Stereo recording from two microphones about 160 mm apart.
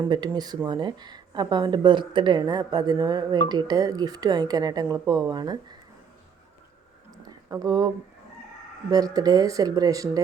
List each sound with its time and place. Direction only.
0.1 s speech: 25° right (ahead or behind)
7.5 s speech: 25° right (ahead or behind)
8.9 s speech: 25° right (ahead or behind)